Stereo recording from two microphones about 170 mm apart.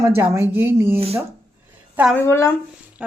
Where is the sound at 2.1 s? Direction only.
15° left (ahead or behind).